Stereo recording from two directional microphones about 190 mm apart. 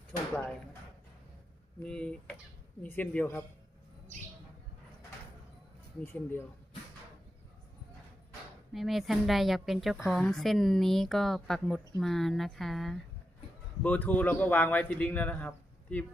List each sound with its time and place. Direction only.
1.8 s a man's voice: 5° left (ahead or behind)
6.1 s a man's voice: 10° left (ahead or behind)
8.7 s a man's voice: centre (ahead or behind)